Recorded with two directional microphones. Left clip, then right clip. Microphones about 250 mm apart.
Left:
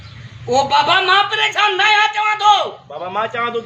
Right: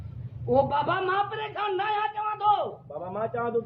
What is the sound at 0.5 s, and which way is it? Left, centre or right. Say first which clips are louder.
Speech: left 10 dB; centre.